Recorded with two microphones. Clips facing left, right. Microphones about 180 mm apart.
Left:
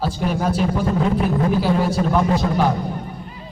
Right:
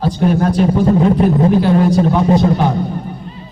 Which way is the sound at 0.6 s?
35° right (ahead or behind).